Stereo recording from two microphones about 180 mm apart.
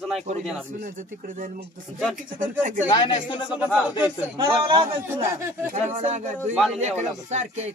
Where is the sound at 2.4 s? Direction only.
45° right (ahead or behind).